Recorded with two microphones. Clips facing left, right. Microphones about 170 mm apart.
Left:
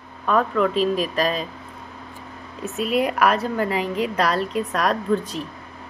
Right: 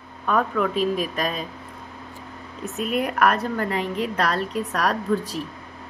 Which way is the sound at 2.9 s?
90° left.